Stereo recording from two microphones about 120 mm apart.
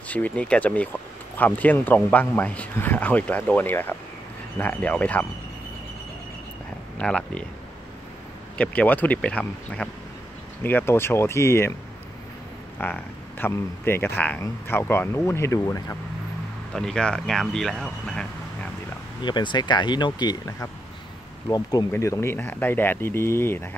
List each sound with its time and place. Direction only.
0.1 s speech: 10° left (ahead or behind)
7.0 s speech: 10° left (ahead or behind)
8.5 s speech: 15° left (ahead or behind)
12.7 s speech: 15° left (ahead or behind)
16.7 s speech: 5° left (ahead or behind)
19.2 s speech: 40° left (ahead or behind); by 23.7 s 20° left (ahead or behind)